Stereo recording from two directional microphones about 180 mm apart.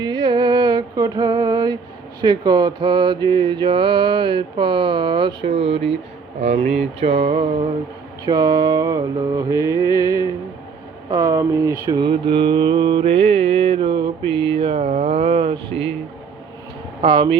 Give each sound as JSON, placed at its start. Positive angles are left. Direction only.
{"t": 0.0, "sound": "a sound", "side_deg": -25}
{"t": 2.2, "sound": "mantra", "side_deg": -25}
{"t": 6.4, "sound": "speech", "side_deg": -40}
{"t": 7.0, "sound": "mantra", "side_deg": -30}
{"t": 17.0, "sound": "mantra", "side_deg": -30}